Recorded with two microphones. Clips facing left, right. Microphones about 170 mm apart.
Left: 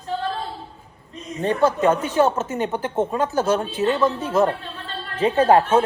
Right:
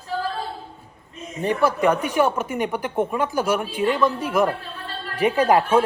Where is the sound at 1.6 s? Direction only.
10° right (ahead or behind).